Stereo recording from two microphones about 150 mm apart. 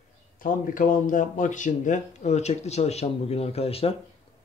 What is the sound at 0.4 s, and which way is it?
Speech, 65° left (ahead or behind).